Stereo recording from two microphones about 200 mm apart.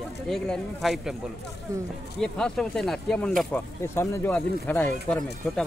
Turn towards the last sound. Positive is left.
turn(degrees=5)  # may be behind; listen again after turning